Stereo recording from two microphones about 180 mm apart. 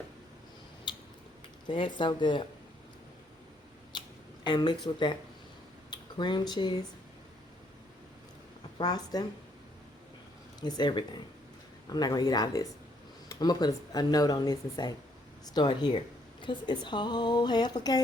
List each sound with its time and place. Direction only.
0.9 s tick-tock: 25° left (ahead or behind)
1.6 s speech: 25° left (ahead or behind)
3.9 s a sound: 25° left (ahead or behind)
4.4 s speech: 25° left (ahead or behind)
8.8 s speech: 20° left (ahead or behind)
10.6 s speech: 25° left (ahead or behind)